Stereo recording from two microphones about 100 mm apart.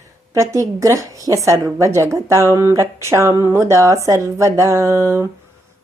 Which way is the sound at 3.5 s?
30° right (ahead or behind).